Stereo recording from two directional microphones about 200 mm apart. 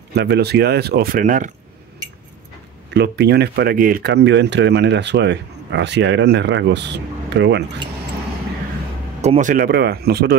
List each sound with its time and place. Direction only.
0.1 s speech: 55° right (ahead or behind); by 1.5 s 40° right (ahead or behind)
2.9 s speech: 55° right (ahead or behind)
9.2 s speech: 35° right (ahead or behind); by 10.3 s 55° right (ahead or behind)